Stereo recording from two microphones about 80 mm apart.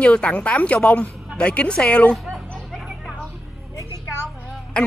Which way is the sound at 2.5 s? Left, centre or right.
Centre.